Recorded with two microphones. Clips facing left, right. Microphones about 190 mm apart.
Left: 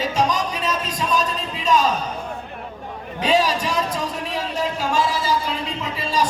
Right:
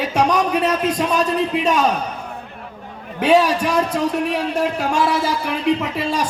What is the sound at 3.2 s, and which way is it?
A man's voice, 60° right (ahead or behind).